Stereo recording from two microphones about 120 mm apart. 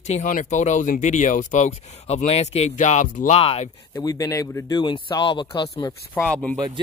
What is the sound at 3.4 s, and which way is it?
Speech, 55° left (ahead or behind).